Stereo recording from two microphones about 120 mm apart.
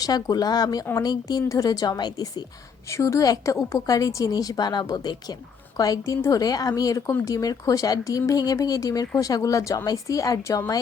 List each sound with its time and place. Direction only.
0.0 s a woman's voice: 30° left (ahead or behind)